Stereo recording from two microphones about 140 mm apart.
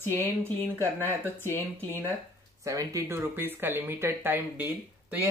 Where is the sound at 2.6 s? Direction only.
20° right (ahead or behind).